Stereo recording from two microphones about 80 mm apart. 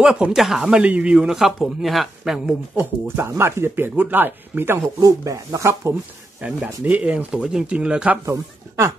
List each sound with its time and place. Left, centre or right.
0.0 s speech: centre
2.8 s speech: right
5.0 s speech: right
6.4 s speech: centre
8.3 s speech: right